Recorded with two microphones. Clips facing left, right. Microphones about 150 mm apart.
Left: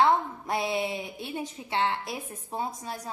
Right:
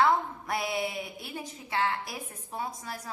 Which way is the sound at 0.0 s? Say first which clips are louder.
Left 2 dB; 25° left (ahead or behind).